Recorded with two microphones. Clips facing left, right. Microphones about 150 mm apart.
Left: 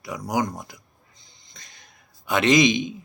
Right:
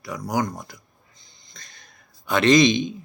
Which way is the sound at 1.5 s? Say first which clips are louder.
Right 1 dB; 15° left (ahead or behind).